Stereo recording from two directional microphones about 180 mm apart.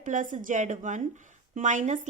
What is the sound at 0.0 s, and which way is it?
A woman's voice, 45° right (ahead or behind).